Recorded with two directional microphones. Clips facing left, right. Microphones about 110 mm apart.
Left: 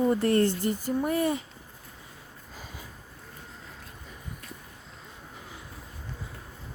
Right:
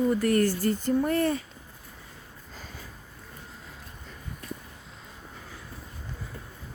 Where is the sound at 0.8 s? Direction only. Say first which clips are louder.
Right 2 dB; 10° left (ahead or behind).